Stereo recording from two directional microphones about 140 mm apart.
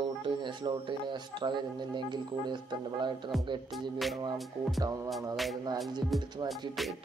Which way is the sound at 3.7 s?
Centre (ahead or behind).